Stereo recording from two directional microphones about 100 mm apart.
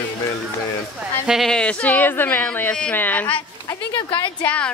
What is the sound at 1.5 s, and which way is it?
Speech, 10° left (ahead or behind).